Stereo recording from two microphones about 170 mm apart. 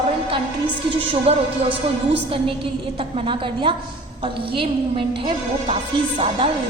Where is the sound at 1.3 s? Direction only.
35° right (ahead or behind).